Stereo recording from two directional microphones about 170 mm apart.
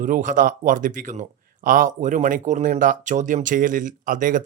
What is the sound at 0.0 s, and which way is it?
Speech, 50° right (ahead or behind).